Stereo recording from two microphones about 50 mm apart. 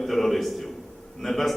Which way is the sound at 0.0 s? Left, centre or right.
Centre.